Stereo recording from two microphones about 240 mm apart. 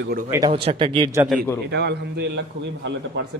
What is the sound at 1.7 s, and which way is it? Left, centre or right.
Speech, right.